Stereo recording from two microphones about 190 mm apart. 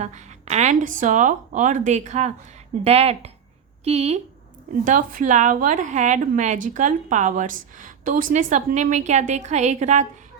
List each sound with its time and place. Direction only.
0.0 s a woman's voice: 35° right (ahead or behind)